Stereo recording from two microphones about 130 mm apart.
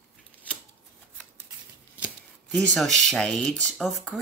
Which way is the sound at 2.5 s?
Centre (ahead or behind).